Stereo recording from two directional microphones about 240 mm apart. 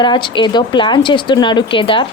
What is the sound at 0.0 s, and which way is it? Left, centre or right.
A woman's voice, centre.